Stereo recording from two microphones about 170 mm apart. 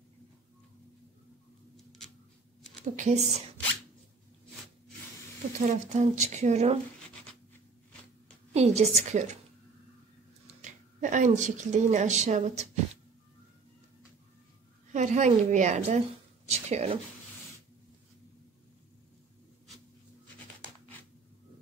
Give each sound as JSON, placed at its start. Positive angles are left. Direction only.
{"t": 3.0, "sound": "speech", "side_deg": -40}
{"t": 5.6, "sound": "speech", "side_deg": -40}
{"t": 8.5, "sound": "speech", "side_deg": -40}
{"t": 10.6, "sound": "a woman's voice", "side_deg": -45}
{"t": 14.9, "sound": "a woman's voice", "side_deg": -45}
{"t": 16.4, "sound": "a sound", "side_deg": -40}